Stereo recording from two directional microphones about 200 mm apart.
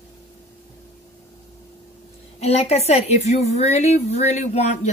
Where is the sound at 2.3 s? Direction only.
30° left (ahead or behind).